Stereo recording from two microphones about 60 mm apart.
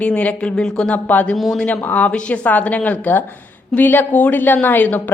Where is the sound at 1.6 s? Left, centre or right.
Left.